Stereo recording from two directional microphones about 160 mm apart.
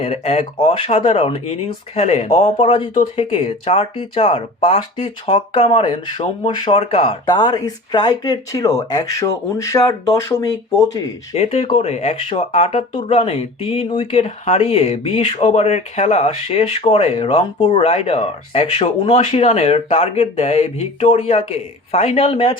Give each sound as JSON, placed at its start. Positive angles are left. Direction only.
{"t": 0.0, "sound": "speech", "side_deg": 40}
{"t": 11.3, "sound": "speech", "side_deg": 35}